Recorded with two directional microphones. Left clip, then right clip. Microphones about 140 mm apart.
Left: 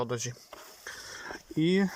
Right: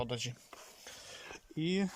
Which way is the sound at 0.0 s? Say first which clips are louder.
Left 5 dB; 10° right (ahead or behind).